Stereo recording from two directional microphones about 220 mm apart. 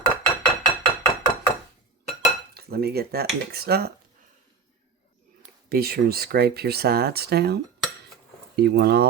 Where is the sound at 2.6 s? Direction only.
45° right (ahead or behind).